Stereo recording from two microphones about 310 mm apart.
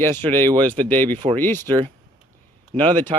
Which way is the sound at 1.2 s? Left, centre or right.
Centre.